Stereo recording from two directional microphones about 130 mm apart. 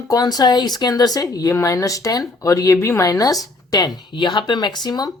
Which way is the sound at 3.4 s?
30° left (ahead or behind).